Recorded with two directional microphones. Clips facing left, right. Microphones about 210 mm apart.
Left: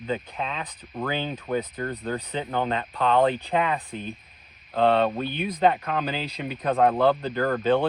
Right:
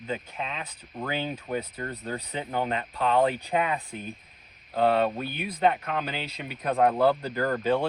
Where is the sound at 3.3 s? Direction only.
35° left (ahead or behind).